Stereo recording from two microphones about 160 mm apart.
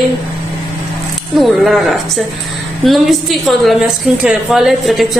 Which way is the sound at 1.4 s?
Centre (ahead or behind).